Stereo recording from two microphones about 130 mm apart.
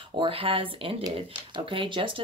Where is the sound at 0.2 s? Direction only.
45° right (ahead or behind).